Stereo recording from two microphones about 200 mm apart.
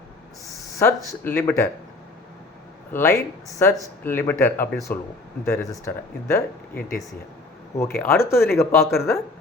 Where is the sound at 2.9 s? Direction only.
10° left (ahead or behind).